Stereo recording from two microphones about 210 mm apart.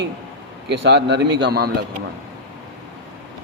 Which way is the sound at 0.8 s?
55° right (ahead or behind).